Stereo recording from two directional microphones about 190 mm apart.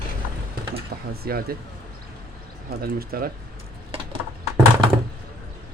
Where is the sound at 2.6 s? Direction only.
50° right (ahead or behind).